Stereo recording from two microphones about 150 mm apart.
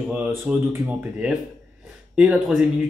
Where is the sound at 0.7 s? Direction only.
10° right (ahead or behind).